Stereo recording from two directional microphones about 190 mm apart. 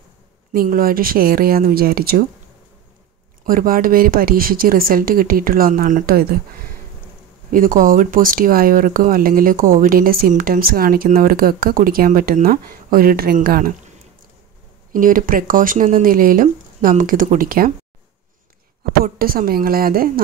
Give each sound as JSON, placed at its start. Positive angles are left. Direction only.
{"t": 0.5, "sound": "speech", "side_deg": -45}
{"t": 3.4, "sound": "speech", "side_deg": -50}
{"t": 7.5, "sound": "speech", "side_deg": -45}
{"t": 14.9, "sound": "speech", "side_deg": -45}
{"t": 18.9, "sound": "speech", "side_deg": -50}